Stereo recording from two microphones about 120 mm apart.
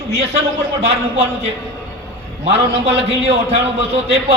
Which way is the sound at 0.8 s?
55° right (ahead or behind).